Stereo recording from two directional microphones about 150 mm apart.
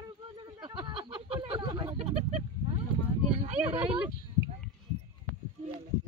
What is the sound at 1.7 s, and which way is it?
Speech, 35° right (ahead or behind).